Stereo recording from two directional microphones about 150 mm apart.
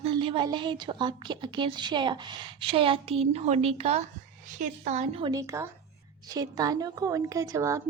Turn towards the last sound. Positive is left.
turn(degrees=-20)  # may be behind; listen again after turning